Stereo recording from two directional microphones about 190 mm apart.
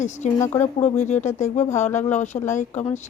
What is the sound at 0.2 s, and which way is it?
Speech, 40° left (ahead or behind).